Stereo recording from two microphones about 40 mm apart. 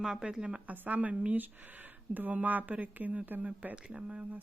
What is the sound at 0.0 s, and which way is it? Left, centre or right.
Speech, centre.